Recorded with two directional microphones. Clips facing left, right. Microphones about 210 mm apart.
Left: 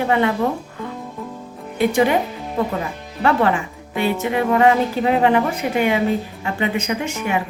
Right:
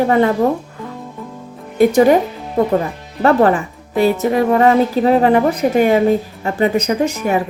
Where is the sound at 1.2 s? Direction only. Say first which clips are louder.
Left 1 dB; centre (ahead or behind).